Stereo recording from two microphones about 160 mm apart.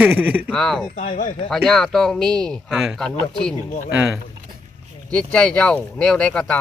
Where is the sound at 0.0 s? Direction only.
10° right (ahead or behind).